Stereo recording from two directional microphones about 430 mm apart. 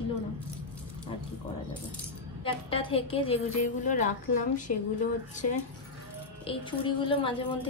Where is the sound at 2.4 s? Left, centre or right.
Centre.